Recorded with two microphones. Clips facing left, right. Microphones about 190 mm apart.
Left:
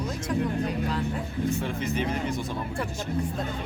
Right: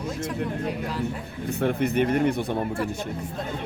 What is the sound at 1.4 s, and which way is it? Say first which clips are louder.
Speech: right 7 dB; 60° right (ahead or behind).